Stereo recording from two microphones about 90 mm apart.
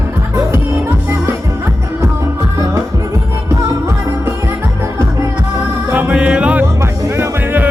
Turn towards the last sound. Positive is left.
turn(degrees=-30)  # may be behind; listen again after turning